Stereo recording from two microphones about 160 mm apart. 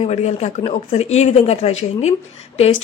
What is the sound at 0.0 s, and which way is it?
A woman's voice, 45° left (ahead or behind).